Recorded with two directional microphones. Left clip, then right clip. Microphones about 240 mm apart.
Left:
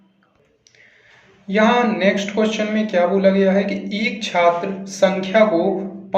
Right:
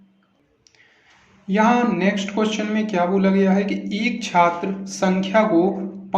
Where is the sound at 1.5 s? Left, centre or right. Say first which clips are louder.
Left 2 dB; right.